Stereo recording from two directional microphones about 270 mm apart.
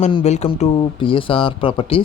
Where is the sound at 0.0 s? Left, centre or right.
Left.